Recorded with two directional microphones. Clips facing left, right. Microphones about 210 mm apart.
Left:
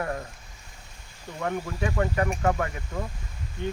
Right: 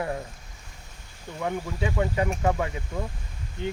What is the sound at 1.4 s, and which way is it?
Speech, 10° right (ahead or behind).